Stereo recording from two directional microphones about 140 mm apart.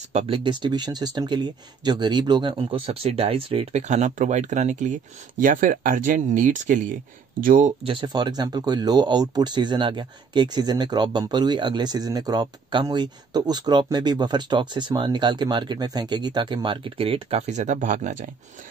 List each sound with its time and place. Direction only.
0.1 s speech: 45° right (ahead or behind)
5.4 s speech: 75° right (ahead or behind)
7.3 s speech: 80° right
7.8 s speech: 40° right (ahead or behind); by 18.2 s 60° right (ahead or behind)